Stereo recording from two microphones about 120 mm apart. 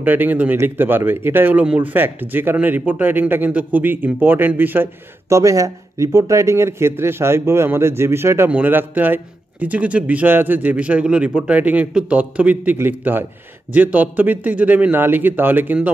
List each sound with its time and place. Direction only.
0.0 s a man's voice: 15° right (ahead or behind)
5.3 s a man's voice: 25° right (ahead or behind)